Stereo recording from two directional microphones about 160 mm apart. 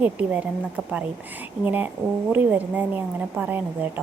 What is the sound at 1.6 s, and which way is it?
A woman's voice, 10° right (ahead or behind).